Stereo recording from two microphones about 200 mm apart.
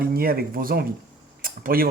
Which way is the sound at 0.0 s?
50° right (ahead or behind).